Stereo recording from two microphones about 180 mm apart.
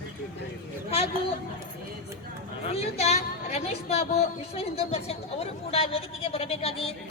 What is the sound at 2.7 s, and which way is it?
A woman's voice, 35° left (ahead or behind).